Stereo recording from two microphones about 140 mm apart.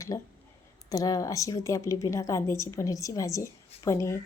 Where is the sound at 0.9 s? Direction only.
25° left (ahead or behind).